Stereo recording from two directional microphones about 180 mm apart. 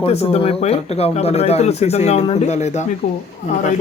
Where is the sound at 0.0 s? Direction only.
35° left (ahead or behind).